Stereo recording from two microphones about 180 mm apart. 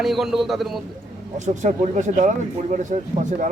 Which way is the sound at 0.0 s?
Centre (ahead or behind).